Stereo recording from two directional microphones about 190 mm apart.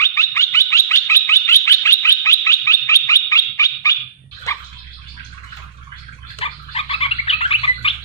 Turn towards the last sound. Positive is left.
turn(degrees=30)  # may be behind; listen again after turning